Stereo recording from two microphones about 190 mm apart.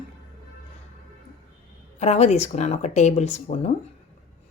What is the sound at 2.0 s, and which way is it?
A woman's voice, 35° left (ahead or behind).